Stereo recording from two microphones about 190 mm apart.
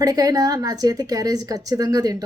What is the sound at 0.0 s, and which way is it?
A woman's voice, 20° right (ahead or behind).